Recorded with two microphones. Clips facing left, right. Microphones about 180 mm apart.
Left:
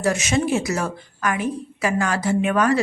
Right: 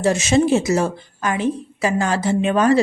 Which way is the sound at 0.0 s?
30° right (ahead or behind).